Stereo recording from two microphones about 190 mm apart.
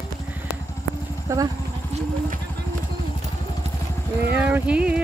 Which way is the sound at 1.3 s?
15° right (ahead or behind).